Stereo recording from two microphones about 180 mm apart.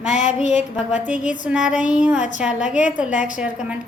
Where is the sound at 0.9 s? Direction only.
10° right (ahead or behind).